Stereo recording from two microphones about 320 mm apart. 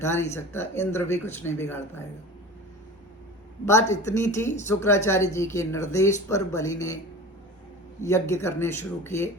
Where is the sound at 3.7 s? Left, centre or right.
Centre.